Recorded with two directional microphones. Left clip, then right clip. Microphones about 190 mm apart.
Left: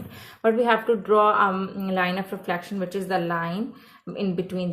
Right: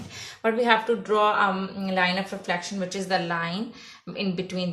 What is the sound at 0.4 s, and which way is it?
A woman's voice, 30° left (ahead or behind).